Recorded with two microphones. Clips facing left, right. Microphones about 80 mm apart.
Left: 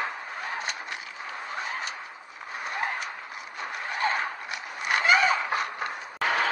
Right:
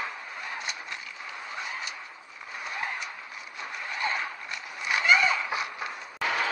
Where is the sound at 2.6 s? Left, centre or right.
Left.